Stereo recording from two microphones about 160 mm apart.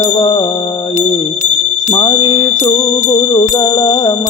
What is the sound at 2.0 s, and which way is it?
Music, 30° left (ahead or behind).